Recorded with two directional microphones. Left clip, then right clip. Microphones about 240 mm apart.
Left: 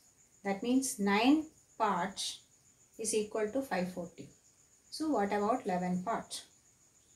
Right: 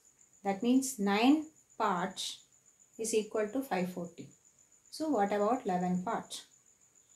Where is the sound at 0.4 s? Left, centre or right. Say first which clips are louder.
Right 2 dB; centre.